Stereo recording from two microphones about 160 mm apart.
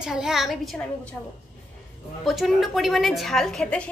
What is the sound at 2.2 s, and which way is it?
A woman's voice, centre (ahead or behind).